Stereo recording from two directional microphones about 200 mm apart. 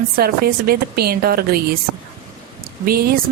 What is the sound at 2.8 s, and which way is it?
Speech, 50° right (ahead or behind).